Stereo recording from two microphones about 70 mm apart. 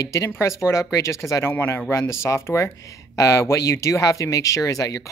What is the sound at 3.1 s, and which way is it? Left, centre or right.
Speech, left.